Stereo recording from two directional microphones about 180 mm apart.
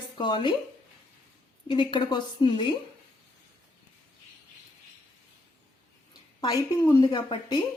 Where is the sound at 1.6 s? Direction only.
25° left (ahead or behind).